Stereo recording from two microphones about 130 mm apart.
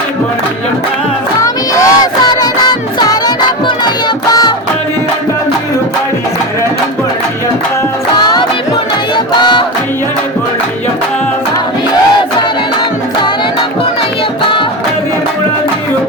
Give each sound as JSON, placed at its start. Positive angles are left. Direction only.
{"t": 1.4, "sound": "music", "side_deg": 25}
{"t": 9.1, "sound": "music", "side_deg": 35}